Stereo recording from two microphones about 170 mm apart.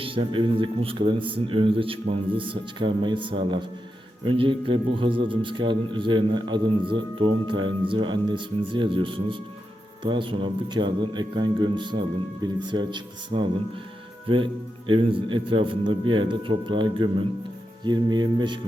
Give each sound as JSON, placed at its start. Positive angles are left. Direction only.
{"t": 0.0, "sound": "a man's voice", "side_deg": -30}